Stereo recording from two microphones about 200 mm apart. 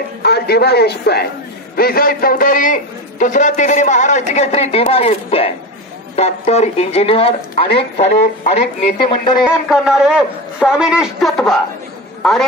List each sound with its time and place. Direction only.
0.2 s a man's voice: 55° left (ahead or behind); by 9.4 s 25° left (ahead or behind)
9.7 s a man's voice: 5° right (ahead or behind)